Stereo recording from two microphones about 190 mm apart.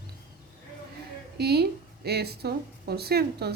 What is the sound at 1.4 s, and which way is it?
A woman's voice, 60° right (ahead or behind).